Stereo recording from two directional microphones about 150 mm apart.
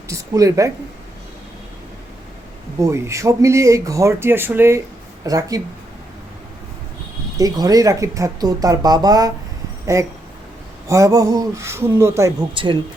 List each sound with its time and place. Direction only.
0.1 s speech: 20° right (ahead or behind)
2.7 s speech: 20° right (ahead or behind)
7.3 s speech: 25° right (ahead or behind)
12.5 s speech: 35° right (ahead or behind)